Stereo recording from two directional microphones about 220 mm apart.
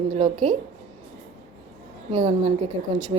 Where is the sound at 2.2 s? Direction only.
30° right (ahead or behind).